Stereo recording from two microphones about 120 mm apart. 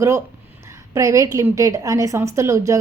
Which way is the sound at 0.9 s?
25° right (ahead or behind).